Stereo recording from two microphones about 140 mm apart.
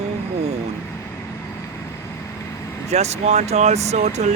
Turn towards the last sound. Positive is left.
turn(degrees=-55)  # may be behind; listen again after turning